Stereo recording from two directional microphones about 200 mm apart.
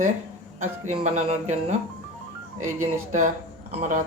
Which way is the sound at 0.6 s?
35° right (ahead or behind).